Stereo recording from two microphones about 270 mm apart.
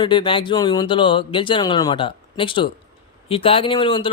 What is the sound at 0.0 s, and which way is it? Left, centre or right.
Speech, centre.